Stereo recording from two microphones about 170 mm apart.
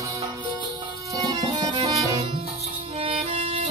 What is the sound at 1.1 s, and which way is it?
Music, 20° right (ahead or behind).